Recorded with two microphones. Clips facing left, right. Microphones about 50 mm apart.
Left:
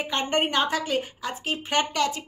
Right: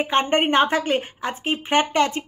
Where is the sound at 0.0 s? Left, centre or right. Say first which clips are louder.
Right 6 dB; right.